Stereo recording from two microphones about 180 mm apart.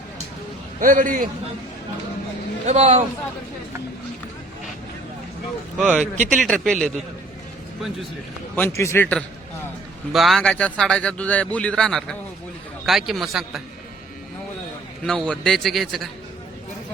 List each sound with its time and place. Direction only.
0.8 s a man's voice: 50° right (ahead or behind)
2.6 s speech: 40° right (ahead or behind)
5.7 s a man's voice: 5° right (ahead or behind)
6.2 s a man's voice: 5° left (ahead or behind)
8.5 s a man's voice: 15° left (ahead or behind)
10.1 s a man's voice: centre (ahead or behind)
15.0 s a man's voice: 5° left (ahead or behind)